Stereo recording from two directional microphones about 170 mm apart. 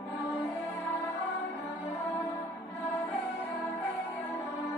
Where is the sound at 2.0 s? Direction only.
10° left (ahead or behind).